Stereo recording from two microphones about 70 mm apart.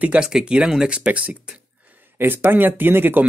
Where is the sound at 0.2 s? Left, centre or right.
Centre.